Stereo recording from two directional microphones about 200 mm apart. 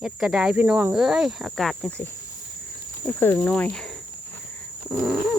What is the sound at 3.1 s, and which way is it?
Speech, 10° left (ahead or behind).